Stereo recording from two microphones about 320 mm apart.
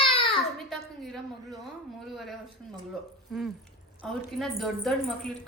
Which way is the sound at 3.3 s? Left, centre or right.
Centre.